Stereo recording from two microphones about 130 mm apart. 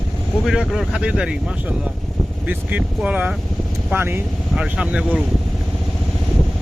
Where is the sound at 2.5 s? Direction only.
10° right (ahead or behind).